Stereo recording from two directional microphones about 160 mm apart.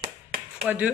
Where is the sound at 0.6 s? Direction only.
10° right (ahead or behind).